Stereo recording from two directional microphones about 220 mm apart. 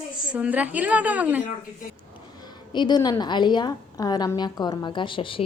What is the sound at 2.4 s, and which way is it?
A woman's voice, 20° left (ahead or behind).